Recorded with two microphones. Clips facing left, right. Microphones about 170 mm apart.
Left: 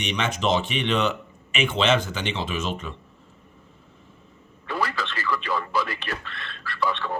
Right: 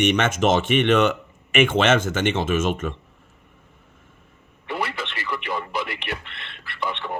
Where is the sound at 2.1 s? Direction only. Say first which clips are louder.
Right 8 dB; 70° right (ahead or behind).